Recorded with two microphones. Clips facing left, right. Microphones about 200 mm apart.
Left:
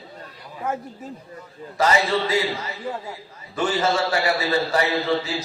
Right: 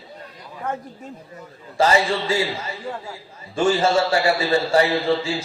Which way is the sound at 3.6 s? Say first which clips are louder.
Right 4 dB; 30° right (ahead or behind).